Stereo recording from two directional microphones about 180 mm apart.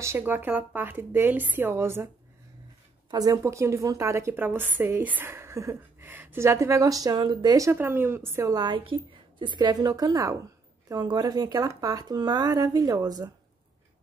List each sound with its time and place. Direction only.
0.0 s a woman's voice: 15° right (ahead or behind)
3.1 s a woman's voice: 20° right (ahead or behind)